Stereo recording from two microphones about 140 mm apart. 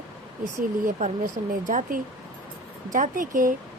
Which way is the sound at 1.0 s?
60° right (ahead or behind).